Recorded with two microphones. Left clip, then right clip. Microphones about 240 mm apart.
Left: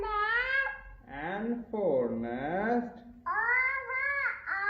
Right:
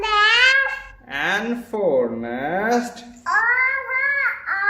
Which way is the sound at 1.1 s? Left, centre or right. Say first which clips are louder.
Right 14 dB; centre.